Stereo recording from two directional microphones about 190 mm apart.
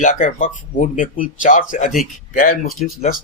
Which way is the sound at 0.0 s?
45° left (ahead or behind).